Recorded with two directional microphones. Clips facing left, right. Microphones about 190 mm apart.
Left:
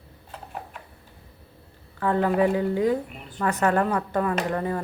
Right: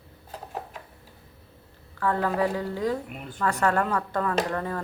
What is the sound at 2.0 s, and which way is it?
A woman's voice, 20° left (ahead or behind).